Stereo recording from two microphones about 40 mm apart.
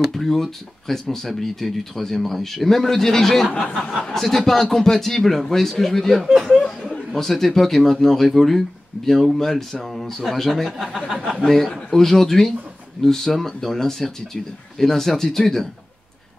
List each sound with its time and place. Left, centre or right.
0.1 s speech: centre
6.6 s chuckle: centre
7.2 s speech: centre
10.9 s speech: centre
11.3 s speech: centre